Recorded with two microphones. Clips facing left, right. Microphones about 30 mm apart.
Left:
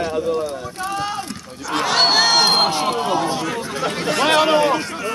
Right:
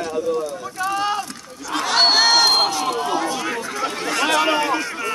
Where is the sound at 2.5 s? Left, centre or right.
Left.